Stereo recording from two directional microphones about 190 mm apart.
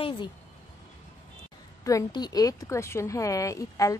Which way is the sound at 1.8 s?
20° left (ahead or behind).